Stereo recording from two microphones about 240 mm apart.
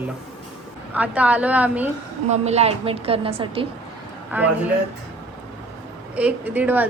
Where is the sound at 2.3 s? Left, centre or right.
Right.